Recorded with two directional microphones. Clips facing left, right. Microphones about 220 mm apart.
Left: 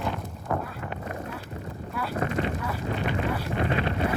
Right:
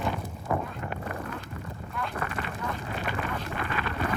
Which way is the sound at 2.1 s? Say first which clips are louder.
Left 10 dB; 30° left (ahead or behind).